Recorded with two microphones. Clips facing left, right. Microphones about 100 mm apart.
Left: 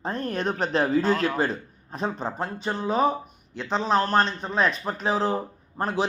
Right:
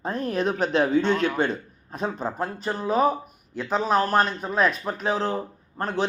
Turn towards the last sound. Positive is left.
turn(degrees=5)  # may be behind; listen again after turning